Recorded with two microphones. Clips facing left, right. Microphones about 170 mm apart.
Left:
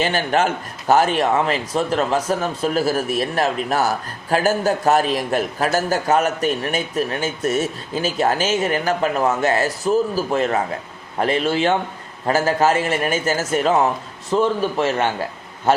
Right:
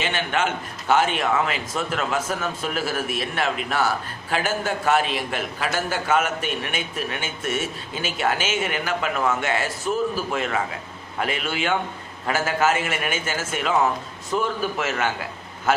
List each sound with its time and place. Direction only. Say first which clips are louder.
0.0 s a man's voice: left 6 dB; 40° left (ahead or behind)
14.3 s a man's voice: left 6 dB; 30° left (ahead or behind)